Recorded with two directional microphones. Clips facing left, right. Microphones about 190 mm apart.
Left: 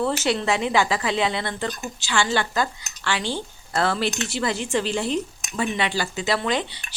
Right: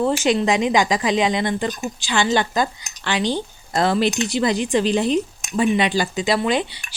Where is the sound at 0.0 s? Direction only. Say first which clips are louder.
Right 4 dB; 15° right (ahead or behind).